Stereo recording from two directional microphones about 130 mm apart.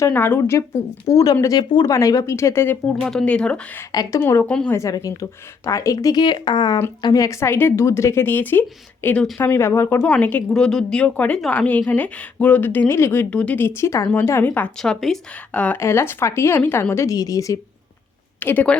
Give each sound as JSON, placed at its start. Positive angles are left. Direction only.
{"t": 0.0, "sound": "speech", "side_deg": 15}
{"t": 3.0, "sound": "speech", "side_deg": 5}
{"t": 18.3, "sound": "speech", "side_deg": 15}